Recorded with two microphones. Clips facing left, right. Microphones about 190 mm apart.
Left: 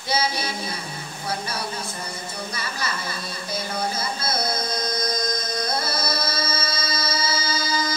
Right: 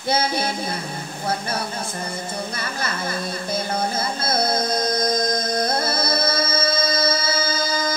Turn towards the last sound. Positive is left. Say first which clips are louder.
# right 2 dB
turn(degrees=-50)  # may be behind; listen again after turning